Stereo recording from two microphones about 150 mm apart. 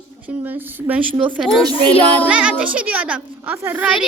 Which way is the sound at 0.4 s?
10° right (ahead or behind).